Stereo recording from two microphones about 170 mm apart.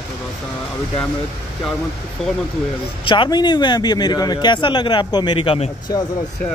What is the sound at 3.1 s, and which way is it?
Speech, 25° left (ahead or behind).